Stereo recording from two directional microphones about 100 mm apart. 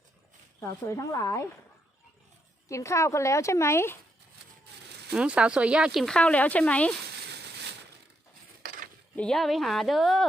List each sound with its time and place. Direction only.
0.6 s speech: 30° left (ahead or behind)
2.6 s speech: 30° left (ahead or behind)
5.1 s speech: 10° right (ahead or behind)
6.1 s speech: 10° left (ahead or behind)
9.1 s speech: 5° left (ahead or behind)